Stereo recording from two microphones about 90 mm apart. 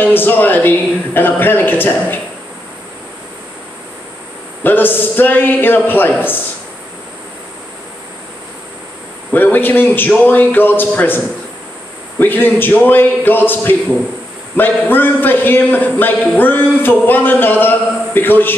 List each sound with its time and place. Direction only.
0.0 s a man's voice: 25° left (ahead or behind)
4.6 s a man's voice: 20° left (ahead or behind)
9.3 s a man's voice: 20° left (ahead or behind)